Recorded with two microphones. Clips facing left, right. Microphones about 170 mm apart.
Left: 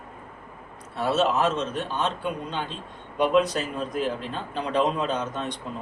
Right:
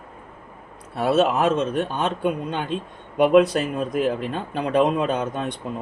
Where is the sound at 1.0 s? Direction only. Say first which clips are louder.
Right 4 dB; 55° right (ahead or behind).